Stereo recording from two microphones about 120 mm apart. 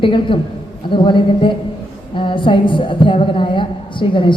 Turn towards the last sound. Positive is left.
turn(degrees=45)  # may be behind; listen again after turning